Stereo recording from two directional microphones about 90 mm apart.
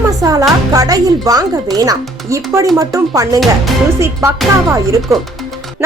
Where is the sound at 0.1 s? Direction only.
40° right (ahead or behind).